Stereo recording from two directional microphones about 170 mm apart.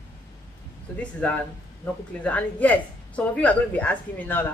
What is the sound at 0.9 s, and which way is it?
Speech, 10° left (ahead or behind).